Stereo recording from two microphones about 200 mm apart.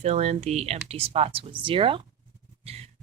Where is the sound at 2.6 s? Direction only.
30° right (ahead or behind).